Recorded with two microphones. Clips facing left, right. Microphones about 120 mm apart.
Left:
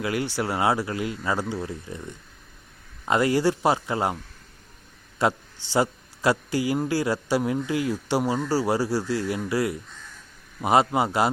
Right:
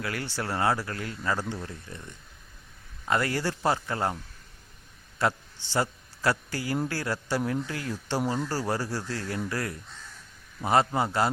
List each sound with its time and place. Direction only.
0.0 s a man's voice: 15° left (ahead or behind)
3.1 s a man's voice: 15° left (ahead or behind)
5.2 s a man's voice: 15° left (ahead or behind)